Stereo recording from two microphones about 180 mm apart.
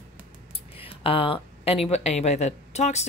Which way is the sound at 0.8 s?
30° left (ahead or behind).